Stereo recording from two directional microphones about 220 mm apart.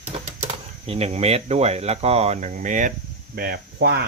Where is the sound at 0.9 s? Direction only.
30° right (ahead or behind); by 4.0 s 45° right (ahead or behind).